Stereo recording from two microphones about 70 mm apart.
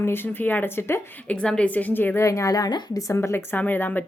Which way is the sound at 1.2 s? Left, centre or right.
Centre.